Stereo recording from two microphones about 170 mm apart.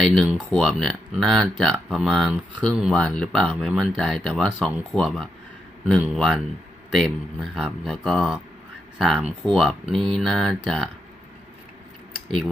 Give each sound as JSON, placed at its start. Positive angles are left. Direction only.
{"t": 0.0, "sound": "speech", "side_deg": 0}